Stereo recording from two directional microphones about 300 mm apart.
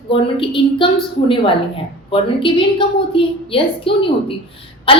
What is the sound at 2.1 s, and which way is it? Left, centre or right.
A woman's voice, centre.